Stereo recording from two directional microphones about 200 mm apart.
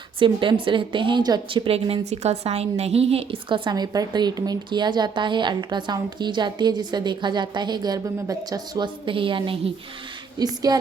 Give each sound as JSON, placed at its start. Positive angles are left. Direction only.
{"t": 0.2, "sound": "speech", "side_deg": -25}